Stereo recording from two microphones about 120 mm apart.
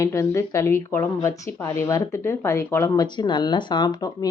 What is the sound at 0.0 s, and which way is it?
Speech, 25° left (ahead or behind).